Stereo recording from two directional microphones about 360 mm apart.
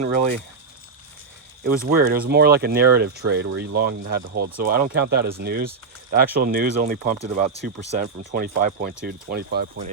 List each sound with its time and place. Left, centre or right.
1.8 s speech: right